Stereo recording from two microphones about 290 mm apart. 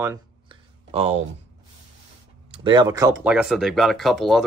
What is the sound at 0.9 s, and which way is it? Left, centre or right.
Speech, right.